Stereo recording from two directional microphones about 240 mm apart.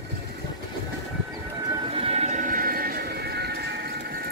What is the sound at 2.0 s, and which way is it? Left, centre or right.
Music, right.